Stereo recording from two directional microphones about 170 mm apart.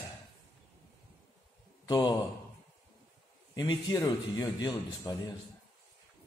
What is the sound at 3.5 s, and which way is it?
Speech, 25° left (ahead or behind).